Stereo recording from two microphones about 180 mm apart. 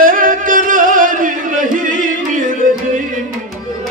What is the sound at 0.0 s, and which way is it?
Music, 50° right (ahead or behind).